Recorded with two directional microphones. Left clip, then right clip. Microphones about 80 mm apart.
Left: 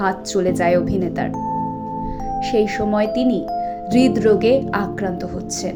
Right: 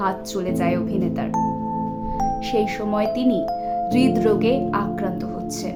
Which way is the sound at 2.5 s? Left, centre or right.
Left.